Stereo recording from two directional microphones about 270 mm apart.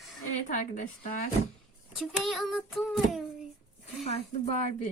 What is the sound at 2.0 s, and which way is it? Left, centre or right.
Speech, centre.